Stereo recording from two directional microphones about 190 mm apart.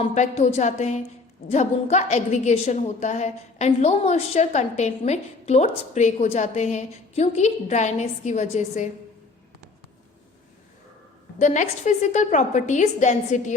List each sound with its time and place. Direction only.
0.0 s a woman's voice: 35° left (ahead or behind)
11.3 s a woman's voice: 40° left (ahead or behind)